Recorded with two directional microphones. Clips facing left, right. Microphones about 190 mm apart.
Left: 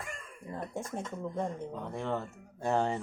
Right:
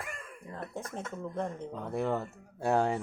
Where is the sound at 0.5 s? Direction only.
15° left (ahead or behind).